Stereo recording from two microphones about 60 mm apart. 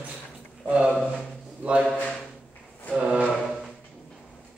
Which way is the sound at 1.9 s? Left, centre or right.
Left.